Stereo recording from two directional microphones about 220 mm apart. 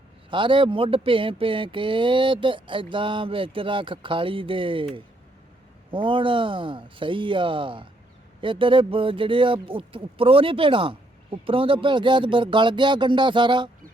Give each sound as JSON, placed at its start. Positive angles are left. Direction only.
{"t": 0.3, "sound": "speech", "side_deg": -20}